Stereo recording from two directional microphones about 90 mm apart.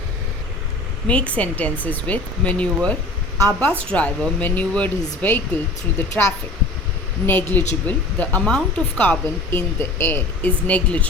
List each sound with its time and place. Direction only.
1.0 s speech: 15° left (ahead or behind)
7.3 s speech: 20° left (ahead or behind)